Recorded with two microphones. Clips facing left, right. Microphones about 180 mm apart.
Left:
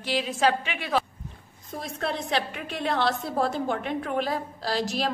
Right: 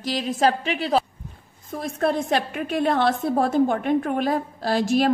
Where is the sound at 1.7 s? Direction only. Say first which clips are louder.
Right 7 dB; 50° right (ahead or behind).